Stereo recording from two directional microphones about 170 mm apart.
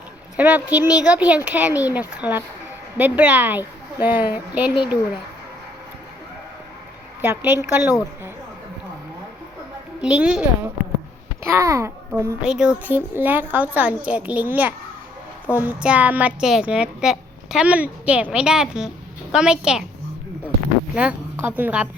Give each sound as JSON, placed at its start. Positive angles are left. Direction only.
{"t": 0.3, "sound": "a child's voice", "side_deg": -10}
{"t": 7.2, "sound": "a child's voice", "side_deg": -10}
{"t": 10.0, "sound": "a woman's voice", "side_deg": -5}
{"t": 11.4, "sound": "a child's voice", "side_deg": -15}
{"t": 12.4, "sound": "a child's voice", "side_deg": -5}
{"t": 20.9, "sound": "a woman's voice", "side_deg": -5}